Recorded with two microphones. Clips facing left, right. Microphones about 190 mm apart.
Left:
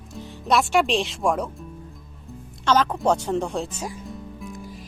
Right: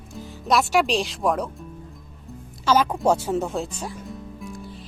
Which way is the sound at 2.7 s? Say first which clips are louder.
Right 1 dB; 10° right (ahead or behind).